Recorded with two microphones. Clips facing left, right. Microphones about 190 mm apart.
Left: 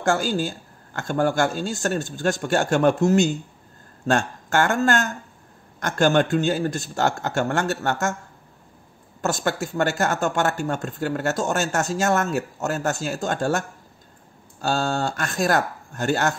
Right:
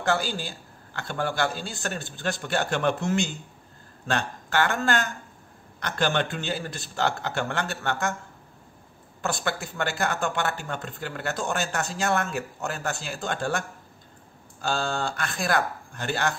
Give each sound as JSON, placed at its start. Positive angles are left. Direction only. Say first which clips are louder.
{"t": 0.0, "sound": "speech", "louder": "left 5 dB", "side_deg": 45}
{"t": 9.2, "sound": "speech", "louder": "left 5 dB", "side_deg": 45}